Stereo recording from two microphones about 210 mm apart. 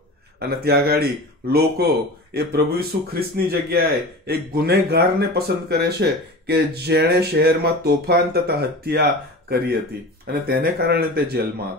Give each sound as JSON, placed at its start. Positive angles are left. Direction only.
{"t": 0.4, "sound": "speech", "side_deg": -50}